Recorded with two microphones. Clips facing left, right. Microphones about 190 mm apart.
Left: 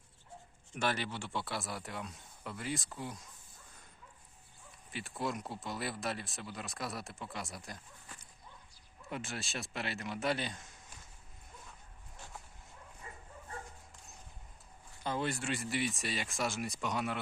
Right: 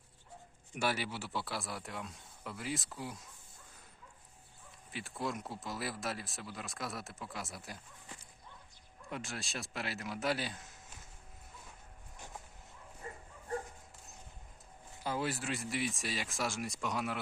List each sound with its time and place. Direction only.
0.7 s speech: 10° right (ahead or behind)
4.9 s speech: centre (ahead or behind)
9.0 s speech: centre (ahead or behind)
15.0 s speech: 5° right (ahead or behind)